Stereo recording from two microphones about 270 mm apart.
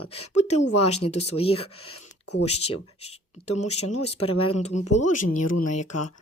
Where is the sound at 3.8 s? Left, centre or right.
Left.